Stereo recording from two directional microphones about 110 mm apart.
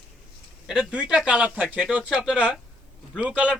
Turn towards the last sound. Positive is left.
turn(degrees=-10)  # may be behind; listen again after turning